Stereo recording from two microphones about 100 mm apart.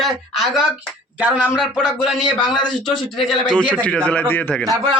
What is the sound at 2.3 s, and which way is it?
Speech, 55° left (ahead or behind).